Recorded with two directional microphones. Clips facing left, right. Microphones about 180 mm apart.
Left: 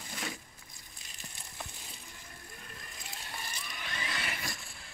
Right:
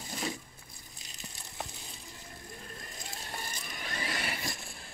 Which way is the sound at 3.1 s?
45° right (ahead or behind).